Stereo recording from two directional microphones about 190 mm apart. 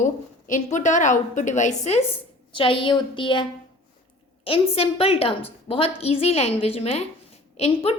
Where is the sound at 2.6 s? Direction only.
25° left (ahead or behind).